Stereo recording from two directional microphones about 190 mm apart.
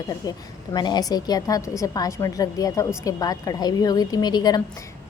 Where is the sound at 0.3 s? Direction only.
20° left (ahead or behind).